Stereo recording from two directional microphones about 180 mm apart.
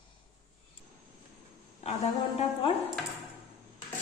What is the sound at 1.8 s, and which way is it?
Speech, 35° left (ahead or behind).